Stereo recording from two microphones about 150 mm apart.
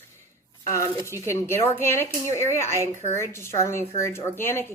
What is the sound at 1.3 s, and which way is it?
A woman's voice, 15° left (ahead or behind).